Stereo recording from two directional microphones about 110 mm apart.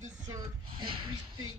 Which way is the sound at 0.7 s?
50° right (ahead or behind).